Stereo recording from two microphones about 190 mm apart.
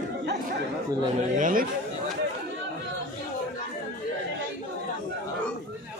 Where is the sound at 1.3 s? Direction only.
45° right (ahead or behind).